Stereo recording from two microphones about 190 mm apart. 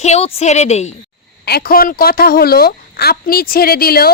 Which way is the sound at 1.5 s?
55° left (ahead or behind).